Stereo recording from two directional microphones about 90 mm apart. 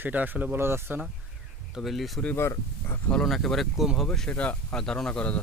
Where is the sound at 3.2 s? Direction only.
Centre (ahead or behind).